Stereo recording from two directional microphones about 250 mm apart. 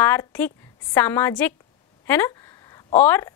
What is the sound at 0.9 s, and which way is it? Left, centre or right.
Speech, centre.